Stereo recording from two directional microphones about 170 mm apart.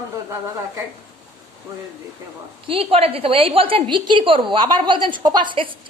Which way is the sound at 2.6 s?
35° right (ahead or behind).